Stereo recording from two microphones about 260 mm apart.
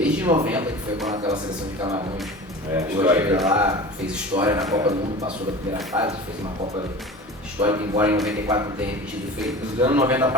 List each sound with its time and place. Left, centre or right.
0.0 s a sound: centre
1.1 s speech: centre
2.7 s speech: centre
7.6 s speech: centre
9.8 s speech: centre